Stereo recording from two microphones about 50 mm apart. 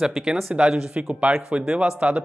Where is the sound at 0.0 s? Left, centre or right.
Centre.